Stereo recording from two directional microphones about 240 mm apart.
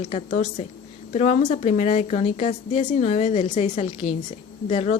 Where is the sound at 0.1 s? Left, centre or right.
Left.